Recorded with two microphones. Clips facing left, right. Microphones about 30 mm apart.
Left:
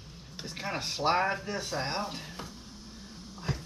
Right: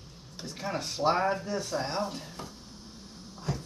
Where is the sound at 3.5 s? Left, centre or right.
Left.